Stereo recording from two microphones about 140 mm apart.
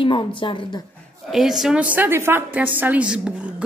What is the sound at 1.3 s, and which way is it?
A woman's voice, 5° right (ahead or behind).